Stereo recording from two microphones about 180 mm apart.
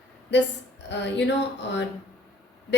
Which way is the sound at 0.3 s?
75° left (ahead or behind).